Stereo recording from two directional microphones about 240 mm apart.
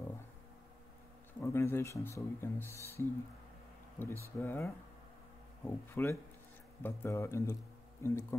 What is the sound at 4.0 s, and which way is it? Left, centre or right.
Speech, centre.